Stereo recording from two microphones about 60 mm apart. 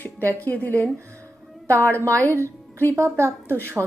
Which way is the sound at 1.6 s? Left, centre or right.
Right.